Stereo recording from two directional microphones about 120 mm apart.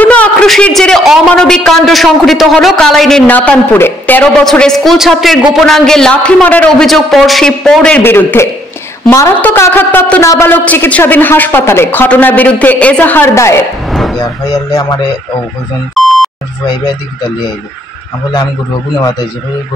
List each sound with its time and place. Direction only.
0.0 s a man's voice: 10° left (ahead or behind)
4.5 s a man's voice: 5° left (ahead or behind); by 13.7 s 25° left (ahead or behind)
13.8 s a sound: centre (ahead or behind)
14.1 s speech: 30° left (ahead or behind)
15.9 s beep: centre (ahead or behind)